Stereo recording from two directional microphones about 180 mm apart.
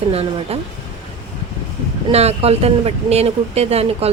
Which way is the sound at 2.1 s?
35° right (ahead or behind).